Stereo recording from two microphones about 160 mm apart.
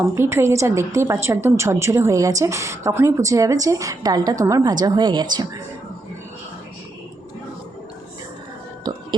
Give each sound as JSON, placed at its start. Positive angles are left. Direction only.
{"t": 0.2, "sound": "a woman's voice", "side_deg": -15}